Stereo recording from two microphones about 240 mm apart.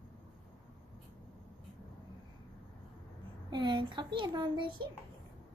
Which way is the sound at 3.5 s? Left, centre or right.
Centre.